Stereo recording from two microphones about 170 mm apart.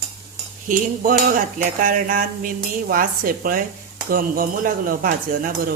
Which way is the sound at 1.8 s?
55° right (ahead or behind).